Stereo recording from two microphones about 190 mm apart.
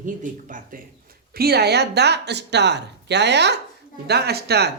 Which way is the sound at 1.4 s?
55° right (ahead or behind).